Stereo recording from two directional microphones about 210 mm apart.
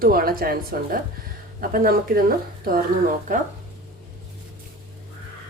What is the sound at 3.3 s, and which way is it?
Speech, 40° right (ahead or behind).